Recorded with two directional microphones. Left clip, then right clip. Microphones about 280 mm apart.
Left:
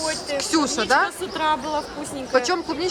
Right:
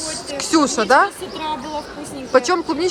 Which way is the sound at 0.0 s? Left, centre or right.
Centre.